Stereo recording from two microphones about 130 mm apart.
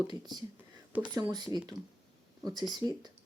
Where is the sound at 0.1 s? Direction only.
30° right (ahead or behind).